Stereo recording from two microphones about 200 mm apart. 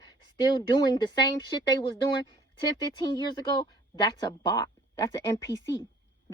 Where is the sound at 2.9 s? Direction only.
20° left (ahead or behind).